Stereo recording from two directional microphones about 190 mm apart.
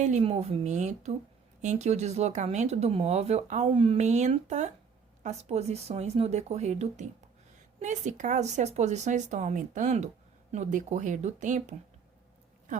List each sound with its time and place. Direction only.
0.0 s speech: 35° right (ahead or behind)